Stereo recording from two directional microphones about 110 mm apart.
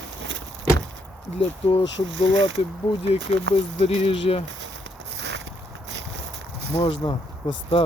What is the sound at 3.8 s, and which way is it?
Speech, 60° left (ahead or behind).